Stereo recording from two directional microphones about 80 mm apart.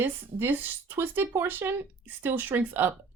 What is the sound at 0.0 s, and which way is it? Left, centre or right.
Speech, right.